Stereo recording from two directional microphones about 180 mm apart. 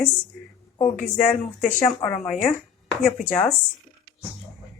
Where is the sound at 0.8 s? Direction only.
45° left (ahead or behind).